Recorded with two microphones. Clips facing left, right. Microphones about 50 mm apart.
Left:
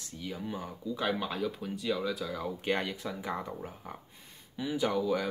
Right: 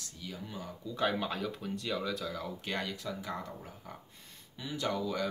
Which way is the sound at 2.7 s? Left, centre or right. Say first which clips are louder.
Left 5 dB; left.